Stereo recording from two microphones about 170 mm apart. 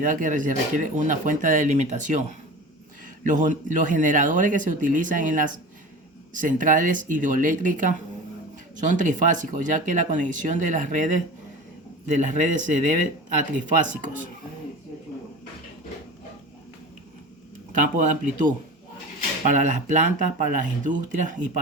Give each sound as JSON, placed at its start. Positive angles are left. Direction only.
{"t": 0.0, "sound": "speech", "side_deg": -50}
{"t": 3.2, "sound": "speech", "side_deg": -50}
{"t": 17.7, "sound": "speech", "side_deg": -50}